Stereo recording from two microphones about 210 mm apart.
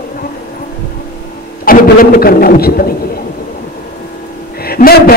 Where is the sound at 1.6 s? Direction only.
45° left (ahead or behind).